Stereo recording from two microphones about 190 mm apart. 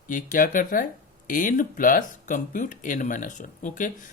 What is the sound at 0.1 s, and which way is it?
Speech, 45° left (ahead or behind).